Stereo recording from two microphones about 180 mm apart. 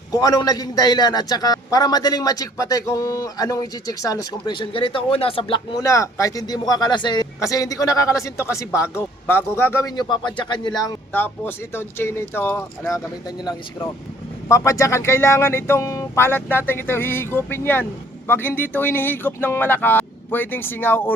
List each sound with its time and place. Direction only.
0.1 s a man's voice: 20° left (ahead or behind)
11.1 s a man's voice: 10° left (ahead or behind)